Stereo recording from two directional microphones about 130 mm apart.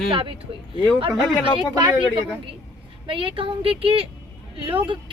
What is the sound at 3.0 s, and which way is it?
Speech, 45° right (ahead or behind).